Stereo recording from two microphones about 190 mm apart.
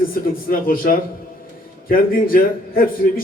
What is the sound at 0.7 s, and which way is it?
A man's voice, 50° left (ahead or behind).